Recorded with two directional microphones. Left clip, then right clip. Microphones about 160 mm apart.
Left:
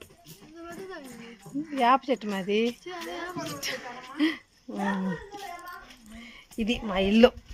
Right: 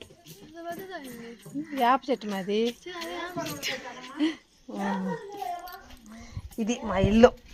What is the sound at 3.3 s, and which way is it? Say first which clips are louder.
Speech: right 2 dB; 15° right (ahead or behind).